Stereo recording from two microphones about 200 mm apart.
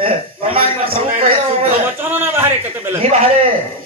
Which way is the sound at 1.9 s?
10° right (ahead or behind).